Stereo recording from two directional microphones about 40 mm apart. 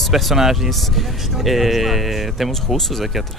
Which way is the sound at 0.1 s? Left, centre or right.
Centre.